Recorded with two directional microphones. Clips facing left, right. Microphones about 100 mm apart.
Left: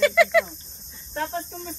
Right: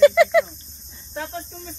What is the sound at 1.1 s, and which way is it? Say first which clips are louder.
Speech: left 2 dB; centre (ahead or behind).